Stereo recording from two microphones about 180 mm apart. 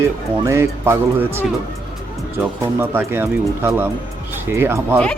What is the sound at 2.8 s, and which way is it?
Speech, 10° right (ahead or behind).